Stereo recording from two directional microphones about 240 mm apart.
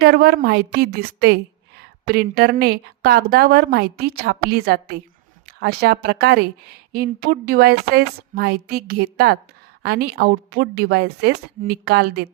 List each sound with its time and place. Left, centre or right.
0.0 s a woman's voice: right